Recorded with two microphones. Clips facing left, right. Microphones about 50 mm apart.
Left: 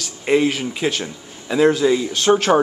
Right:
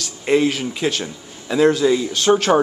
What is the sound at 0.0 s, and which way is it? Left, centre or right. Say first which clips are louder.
Speech: even; left.